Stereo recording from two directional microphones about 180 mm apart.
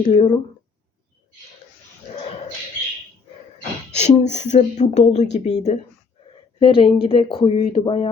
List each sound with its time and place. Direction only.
0.0 s speech: 30° left (ahead or behind)
3.9 s speech: 40° left (ahead or behind)